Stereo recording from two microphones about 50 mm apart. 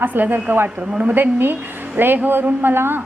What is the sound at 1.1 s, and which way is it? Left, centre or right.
A man's voice, right.